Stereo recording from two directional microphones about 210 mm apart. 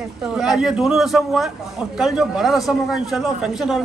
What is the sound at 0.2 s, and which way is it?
A man's voice, 5° right (ahead or behind).